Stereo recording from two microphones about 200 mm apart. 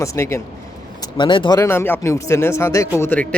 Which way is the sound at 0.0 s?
15° left (ahead or behind).